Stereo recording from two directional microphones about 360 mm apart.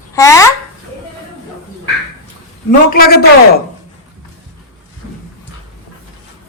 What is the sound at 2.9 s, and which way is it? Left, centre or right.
Speech, left.